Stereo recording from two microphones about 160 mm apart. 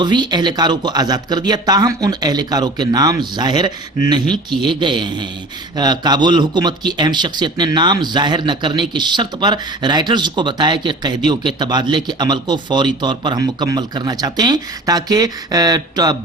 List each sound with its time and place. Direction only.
0.0 s a man's voice: 30° right (ahead or behind)